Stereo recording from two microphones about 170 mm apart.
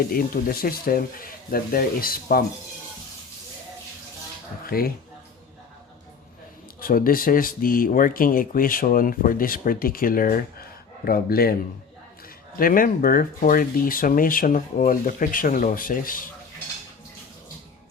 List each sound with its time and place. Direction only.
0.1 s speech: 60° left (ahead or behind)
4.6 s speech: 60° left (ahead or behind)
6.7 s speech: 60° left (ahead or behind)
12.5 s speech: 55° left (ahead or behind)